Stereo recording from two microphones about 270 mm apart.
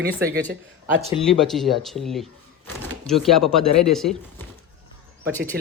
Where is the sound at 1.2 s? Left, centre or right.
Centre.